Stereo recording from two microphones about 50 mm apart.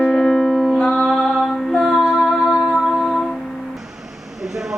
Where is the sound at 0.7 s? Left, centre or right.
Left.